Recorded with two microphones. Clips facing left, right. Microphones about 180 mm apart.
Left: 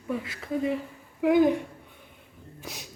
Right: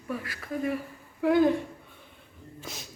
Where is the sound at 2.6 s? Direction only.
15° left (ahead or behind).